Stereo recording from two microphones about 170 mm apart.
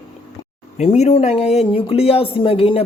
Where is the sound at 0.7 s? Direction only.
40° left (ahead or behind).